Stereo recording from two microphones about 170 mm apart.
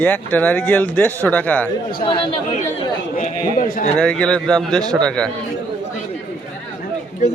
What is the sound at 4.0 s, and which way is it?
Speech, 5° left (ahead or behind).